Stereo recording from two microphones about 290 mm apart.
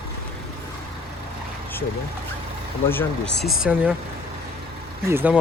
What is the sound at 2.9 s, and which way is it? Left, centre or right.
Speech, centre.